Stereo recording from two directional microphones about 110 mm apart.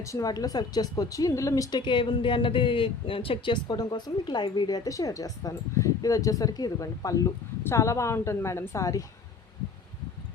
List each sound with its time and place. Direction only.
0.0 s speech: 30° left (ahead or behind)
1.8 s speech: 45° left (ahead or behind); by 9.0 s 30° left (ahead or behind)